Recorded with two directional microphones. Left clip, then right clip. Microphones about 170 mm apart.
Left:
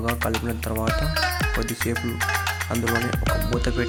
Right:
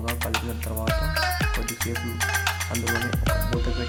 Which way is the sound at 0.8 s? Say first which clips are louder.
Even; centre (ahead or behind).